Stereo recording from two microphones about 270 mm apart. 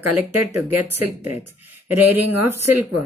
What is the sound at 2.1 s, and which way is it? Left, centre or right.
Speech, right.